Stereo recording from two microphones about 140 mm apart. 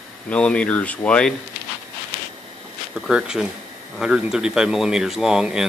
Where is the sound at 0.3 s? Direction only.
10° left (ahead or behind).